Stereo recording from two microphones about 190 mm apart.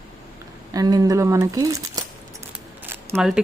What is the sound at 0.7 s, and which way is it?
A woman's voice, 20° right (ahead or behind).